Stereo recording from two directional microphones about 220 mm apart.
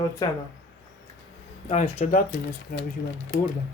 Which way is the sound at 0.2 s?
15° left (ahead or behind).